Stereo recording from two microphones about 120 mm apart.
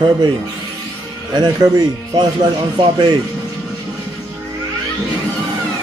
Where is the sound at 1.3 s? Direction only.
35° right (ahead or behind).